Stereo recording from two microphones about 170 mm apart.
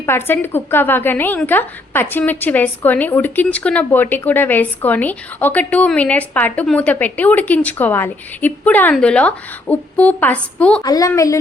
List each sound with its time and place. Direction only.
0.0 s speech: 15° left (ahead or behind)
10.8 s a woman's voice: 20° left (ahead or behind)